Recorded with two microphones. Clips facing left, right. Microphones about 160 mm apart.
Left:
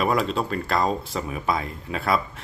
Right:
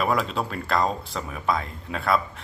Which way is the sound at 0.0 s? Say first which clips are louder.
Left 2 dB; centre (ahead or behind).